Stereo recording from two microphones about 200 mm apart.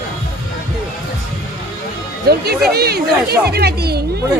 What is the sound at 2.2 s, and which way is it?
Speech, 50° right (ahead or behind).